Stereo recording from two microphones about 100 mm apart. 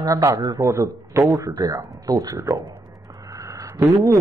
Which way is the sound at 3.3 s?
30° right (ahead or behind).